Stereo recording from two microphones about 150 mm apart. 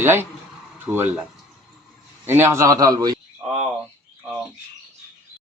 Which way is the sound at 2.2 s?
15° right (ahead or behind).